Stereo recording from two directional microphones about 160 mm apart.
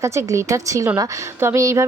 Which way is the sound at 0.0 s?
20° right (ahead or behind).